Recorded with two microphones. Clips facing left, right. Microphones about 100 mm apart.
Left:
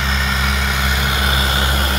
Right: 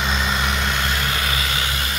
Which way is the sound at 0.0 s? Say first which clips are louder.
Left 1 dB; centre (ahead or behind).